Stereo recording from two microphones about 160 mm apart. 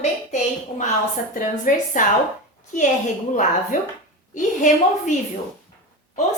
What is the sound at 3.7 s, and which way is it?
A woman's voice, 55° left (ahead or behind).